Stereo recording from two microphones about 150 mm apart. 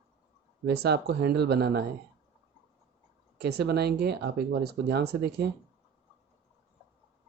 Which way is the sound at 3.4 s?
90° right.